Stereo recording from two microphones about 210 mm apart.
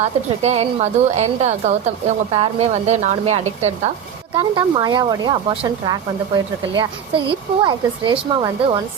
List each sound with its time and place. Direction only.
0.0 s a woman's voice: 30° right (ahead or behind)
4.4 s speech: 20° right (ahead or behind)